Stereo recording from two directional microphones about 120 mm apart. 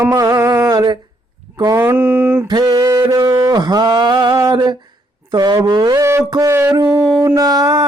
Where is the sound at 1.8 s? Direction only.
20° right (ahead or behind).